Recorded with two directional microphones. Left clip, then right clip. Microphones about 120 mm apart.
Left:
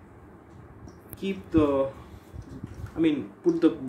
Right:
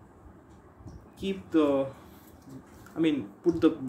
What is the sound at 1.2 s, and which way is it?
Speech, 10° right (ahead or behind).